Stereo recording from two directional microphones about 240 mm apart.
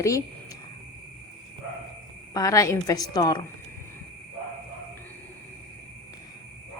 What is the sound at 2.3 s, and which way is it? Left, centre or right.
A woman's voice, centre.